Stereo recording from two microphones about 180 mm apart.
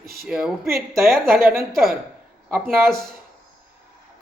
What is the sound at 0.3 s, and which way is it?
Speech, 5° right (ahead or behind).